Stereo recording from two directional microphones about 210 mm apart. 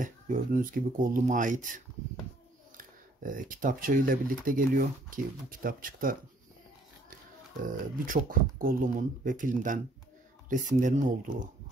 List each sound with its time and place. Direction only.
0.0 s speech: 40° right (ahead or behind)
2.8 s speech: 40° right (ahead or behind)
7.6 s speech: 40° right (ahead or behind)